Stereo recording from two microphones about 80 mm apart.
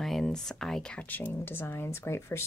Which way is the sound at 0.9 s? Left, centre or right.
Left.